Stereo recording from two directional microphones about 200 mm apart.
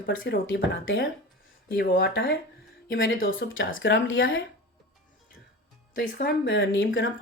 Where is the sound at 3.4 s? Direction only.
60° left (ahead or behind).